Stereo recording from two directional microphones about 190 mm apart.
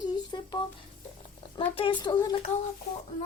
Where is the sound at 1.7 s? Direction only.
25° left (ahead or behind).